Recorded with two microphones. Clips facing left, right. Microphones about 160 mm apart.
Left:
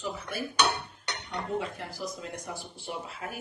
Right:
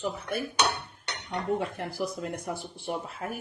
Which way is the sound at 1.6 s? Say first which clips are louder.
Right 3 dB; 60° right (ahead or behind).